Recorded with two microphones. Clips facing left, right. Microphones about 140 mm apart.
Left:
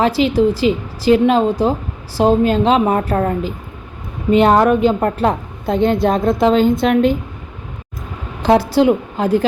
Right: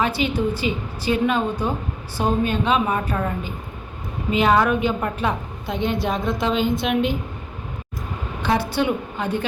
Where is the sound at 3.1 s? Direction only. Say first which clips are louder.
Left 8 dB; 50° left (ahead or behind).